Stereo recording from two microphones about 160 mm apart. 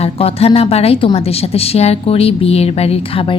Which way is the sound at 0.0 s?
40° left (ahead or behind).